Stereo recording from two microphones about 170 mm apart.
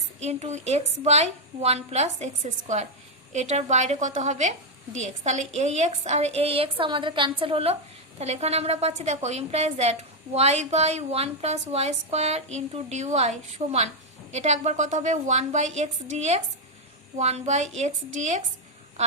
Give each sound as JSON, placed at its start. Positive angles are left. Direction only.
{"t": 0.2, "sound": "a woman's voice", "side_deg": -40}